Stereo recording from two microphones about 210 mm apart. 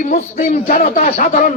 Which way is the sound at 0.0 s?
35° left (ahead or behind).